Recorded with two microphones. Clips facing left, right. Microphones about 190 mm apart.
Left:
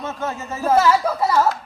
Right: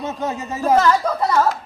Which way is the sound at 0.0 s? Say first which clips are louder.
Right 2 dB; 15° right (ahead or behind).